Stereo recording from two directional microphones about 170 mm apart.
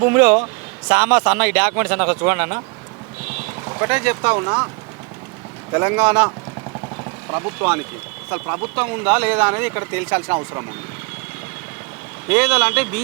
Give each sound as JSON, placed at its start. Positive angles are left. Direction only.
{"t": 0.0, "sound": "speech", "side_deg": -15}
{"t": 3.7, "sound": "speech", "side_deg": -15}
{"t": 5.7, "sound": "speech", "side_deg": -15}
{"t": 12.3, "sound": "speech", "side_deg": -10}